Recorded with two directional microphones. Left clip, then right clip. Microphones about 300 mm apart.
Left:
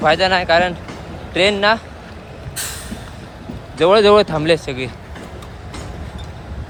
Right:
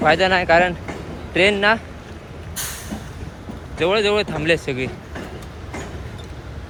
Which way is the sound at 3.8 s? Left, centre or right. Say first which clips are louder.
Left 7 dB; centre.